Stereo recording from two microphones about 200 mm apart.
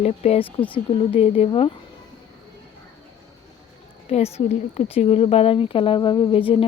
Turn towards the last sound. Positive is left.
turn(degrees=25)  # may be behind; listen again after turning